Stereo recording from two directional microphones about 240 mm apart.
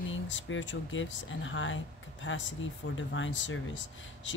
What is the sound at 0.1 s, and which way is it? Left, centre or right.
Speech, left.